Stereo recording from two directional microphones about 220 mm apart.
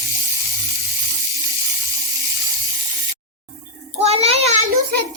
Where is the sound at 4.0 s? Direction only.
25° right (ahead or behind).